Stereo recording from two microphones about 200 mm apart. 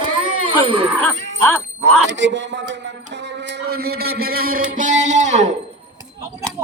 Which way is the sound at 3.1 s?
60° right (ahead or behind).